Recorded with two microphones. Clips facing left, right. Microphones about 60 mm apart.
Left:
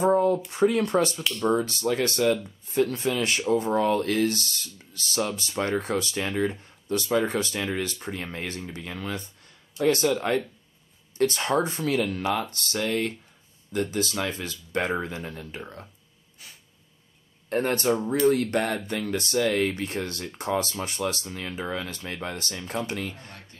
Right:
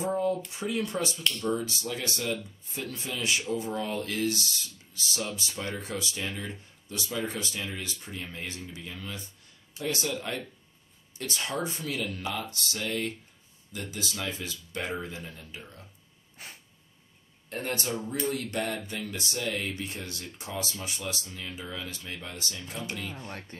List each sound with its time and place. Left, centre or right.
0.0 s a sound: left
0.5 s speech: left
16.4 s sneeze: right
17.5 s speech: left